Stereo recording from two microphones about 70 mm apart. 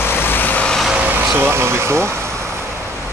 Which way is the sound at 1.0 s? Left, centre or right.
Right.